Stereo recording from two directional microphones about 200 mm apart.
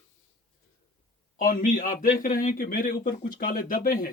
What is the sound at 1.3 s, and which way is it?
A man's voice, 45° left (ahead or behind).